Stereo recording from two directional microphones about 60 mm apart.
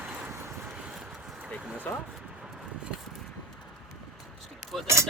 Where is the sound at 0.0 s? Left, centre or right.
Right.